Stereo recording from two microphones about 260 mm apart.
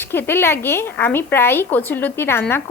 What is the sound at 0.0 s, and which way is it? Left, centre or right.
A woman's voice, centre.